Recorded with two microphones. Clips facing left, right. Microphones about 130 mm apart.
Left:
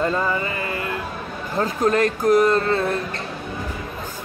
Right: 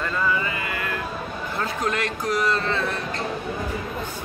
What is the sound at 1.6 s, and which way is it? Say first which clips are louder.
A man's voice: left 8 dB; 40° left (ahead or behind).